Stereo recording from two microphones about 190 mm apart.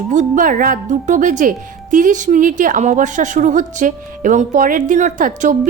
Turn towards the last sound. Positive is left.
turn(degrees=-45)  # may be behind; listen again after turning